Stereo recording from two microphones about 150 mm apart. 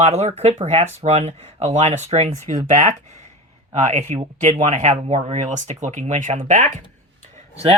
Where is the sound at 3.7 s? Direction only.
50° right (ahead or behind).